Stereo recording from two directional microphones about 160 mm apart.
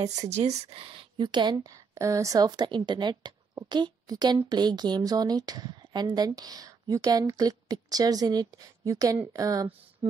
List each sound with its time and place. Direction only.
0.3 s a woman's voice: 45° right (ahead or behind); by 9.7 s 20° right (ahead or behind)